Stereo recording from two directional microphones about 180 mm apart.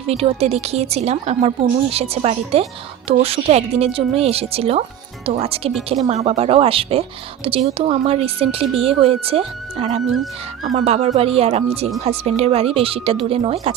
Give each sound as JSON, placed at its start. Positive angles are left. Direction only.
{"t": 0.1, "sound": "speech", "side_deg": -35}